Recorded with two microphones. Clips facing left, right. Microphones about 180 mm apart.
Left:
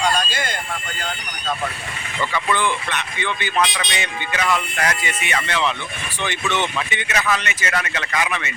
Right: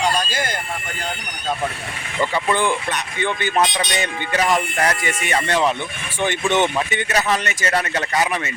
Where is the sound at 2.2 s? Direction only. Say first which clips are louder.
Right 3 dB; 30° right (ahead or behind).